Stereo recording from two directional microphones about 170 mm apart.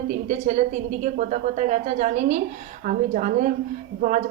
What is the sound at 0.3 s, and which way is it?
Speech, 45° right (ahead or behind).